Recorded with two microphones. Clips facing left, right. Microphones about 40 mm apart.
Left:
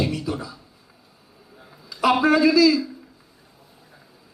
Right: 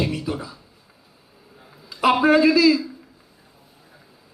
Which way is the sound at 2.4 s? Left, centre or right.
Centre.